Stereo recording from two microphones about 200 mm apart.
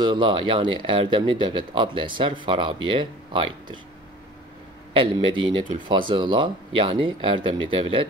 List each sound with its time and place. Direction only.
0.0 s speech: 25° right (ahead or behind)
4.9 s speech: 25° right (ahead or behind)